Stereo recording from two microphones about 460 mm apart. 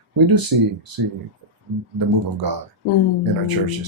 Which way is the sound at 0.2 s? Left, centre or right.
Right.